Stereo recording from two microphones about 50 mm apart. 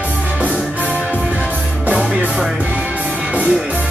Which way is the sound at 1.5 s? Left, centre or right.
Right.